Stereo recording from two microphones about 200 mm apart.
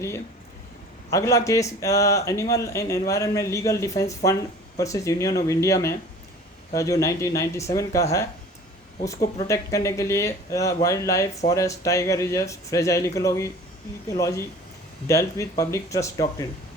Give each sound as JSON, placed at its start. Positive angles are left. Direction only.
{"t": 1.1, "sound": "speech", "side_deg": 15}